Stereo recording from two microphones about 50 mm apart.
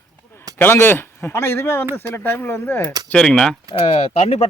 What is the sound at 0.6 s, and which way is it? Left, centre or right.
Speech, left.